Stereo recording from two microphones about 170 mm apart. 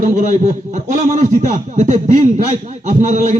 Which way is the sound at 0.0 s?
50° right (ahead or behind).